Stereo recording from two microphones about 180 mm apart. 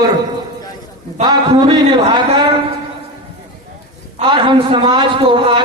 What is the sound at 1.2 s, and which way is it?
A man's voice, 25° right (ahead or behind).